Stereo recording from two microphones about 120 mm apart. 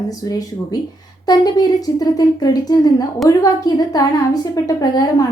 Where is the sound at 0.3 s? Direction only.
30° left (ahead or behind).